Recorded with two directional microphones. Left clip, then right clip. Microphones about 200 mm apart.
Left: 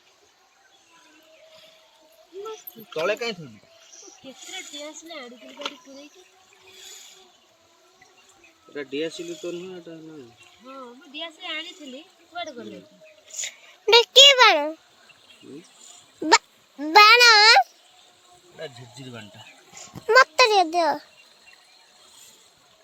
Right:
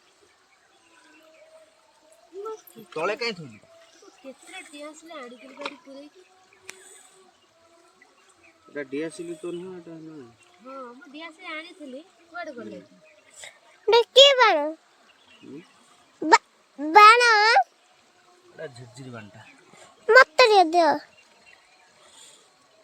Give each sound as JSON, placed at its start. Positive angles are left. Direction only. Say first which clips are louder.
{"t": 2.9, "sound": "a child's voice", "louder": "left 2 dB", "side_deg": -5}
{"t": 5.0, "sound": "a child's voice", "louder": "left 1 dB", "side_deg": 5}
{"t": 9.0, "sound": "speech", "louder": "left 5 dB", "side_deg": -20}
{"t": 10.7, "sound": "speech", "louder": "right 1 dB", "side_deg": 10}
{"t": 13.4, "sound": "a child's voice", "louder": "left 1 dB", "side_deg": -5}
{"t": 16.2, "sound": "a sound", "louder": "right 1 dB", "side_deg": 0}
{"t": 18.5, "sound": "speech", "louder": "left 1 dB", "side_deg": 0}
{"t": 20.1, "sound": "a child's voice", "louder": "right 1 dB", "side_deg": -20}